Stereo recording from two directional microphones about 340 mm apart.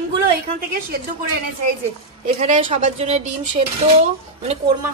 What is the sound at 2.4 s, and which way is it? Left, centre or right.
Speech, centre.